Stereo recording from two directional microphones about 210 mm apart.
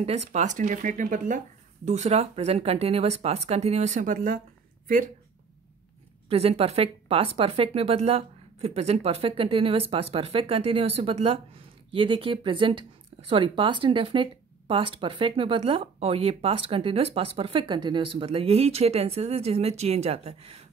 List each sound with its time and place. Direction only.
0.0 s speech: 30° right (ahead or behind)
6.2 s speech: 30° right (ahead or behind)